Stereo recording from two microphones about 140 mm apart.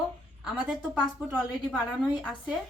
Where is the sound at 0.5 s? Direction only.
5° right (ahead or behind).